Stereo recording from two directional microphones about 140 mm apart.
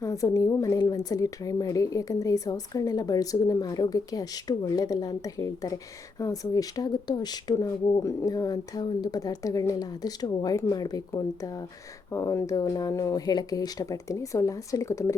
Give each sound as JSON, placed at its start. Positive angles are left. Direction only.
{"t": 0.0, "sound": "a woman's voice", "side_deg": 25}